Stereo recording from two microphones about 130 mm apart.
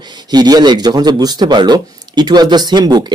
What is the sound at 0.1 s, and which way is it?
A man's voice, 30° right (ahead or behind).